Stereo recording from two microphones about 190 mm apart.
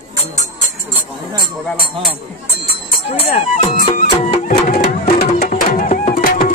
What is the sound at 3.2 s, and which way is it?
Music, 40° left (ahead or behind).